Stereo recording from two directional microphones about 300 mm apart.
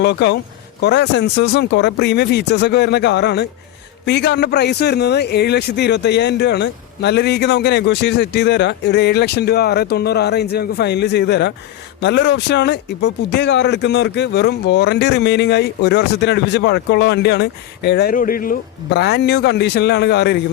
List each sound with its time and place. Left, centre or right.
0.0 s speech: left